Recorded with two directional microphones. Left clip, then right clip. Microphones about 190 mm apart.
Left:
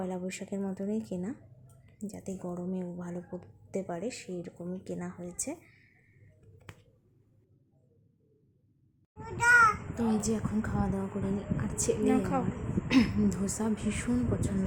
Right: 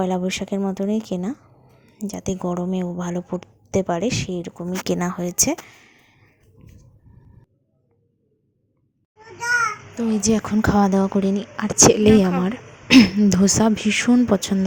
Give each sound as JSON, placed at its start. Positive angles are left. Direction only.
{"t": 0.0, "sound": "speech", "side_deg": -35}
{"t": 9.1, "sound": "a sound", "side_deg": 10}
{"t": 9.9, "sound": "a child's voice", "side_deg": -25}
{"t": 10.2, "sound": "speech", "side_deg": -40}
{"t": 12.9, "sound": "speech", "side_deg": -35}